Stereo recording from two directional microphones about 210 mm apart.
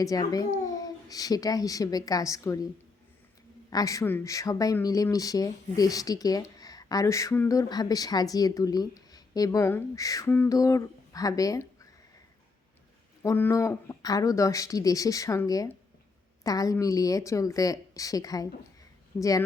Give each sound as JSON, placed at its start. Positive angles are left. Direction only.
{"t": 0.0, "sound": "a child's voice", "side_deg": 15}
{"t": 3.7, "sound": "speech", "side_deg": 15}
{"t": 13.2, "sound": "speech", "side_deg": 10}